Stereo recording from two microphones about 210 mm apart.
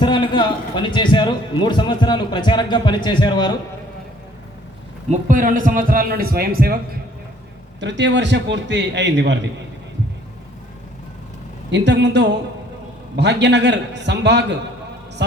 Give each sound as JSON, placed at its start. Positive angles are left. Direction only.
{"t": 0.0, "sound": "speech", "side_deg": 20}
{"t": 5.1, "sound": "speech", "side_deg": -40}
{"t": 7.8, "sound": "a man's voice", "side_deg": -60}
{"t": 11.7, "sound": "a man's voice", "side_deg": -55}